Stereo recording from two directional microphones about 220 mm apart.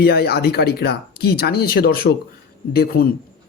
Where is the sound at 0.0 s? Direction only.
45° left (ahead or behind).